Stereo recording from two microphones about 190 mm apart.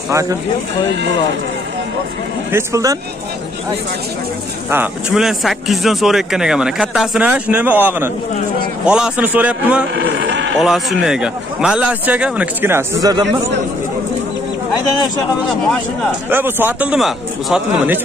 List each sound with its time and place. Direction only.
0.1 s a man's voice: 15° right (ahead or behind)
2.5 s a man's voice: 15° right (ahead or behind)
4.6 s speech: 5° right (ahead or behind)
9.9 s speech: 75° right (ahead or behind)
10.6 s speech: centre (ahead or behind); by 13.2 s 20° right (ahead or behind)
16.3 s a man's voice: 10° right (ahead or behind)